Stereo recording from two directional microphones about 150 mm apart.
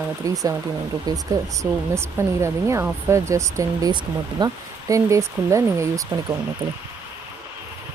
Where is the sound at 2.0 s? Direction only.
20° right (ahead or behind).